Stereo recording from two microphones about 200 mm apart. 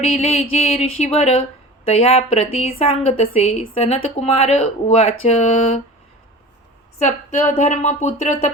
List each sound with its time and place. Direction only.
0.0 s speech: 30° left (ahead or behind)
7.0 s speech: 35° left (ahead or behind)